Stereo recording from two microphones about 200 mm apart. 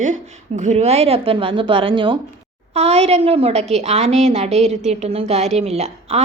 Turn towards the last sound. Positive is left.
turn(degrees=-30)  # may be behind; listen again after turning